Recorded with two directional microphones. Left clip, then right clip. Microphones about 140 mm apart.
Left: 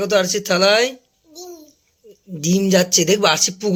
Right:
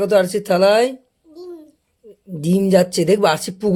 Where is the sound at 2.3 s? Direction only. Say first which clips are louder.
Right 2 dB; 30° right (ahead or behind).